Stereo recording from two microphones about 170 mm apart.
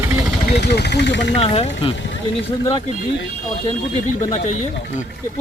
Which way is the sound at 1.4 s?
35° left (ahead or behind).